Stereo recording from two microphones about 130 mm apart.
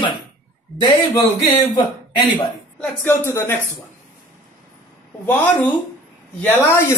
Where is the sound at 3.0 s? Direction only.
15° left (ahead or behind).